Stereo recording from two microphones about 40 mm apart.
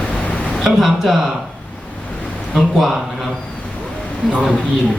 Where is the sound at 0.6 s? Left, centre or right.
Centre.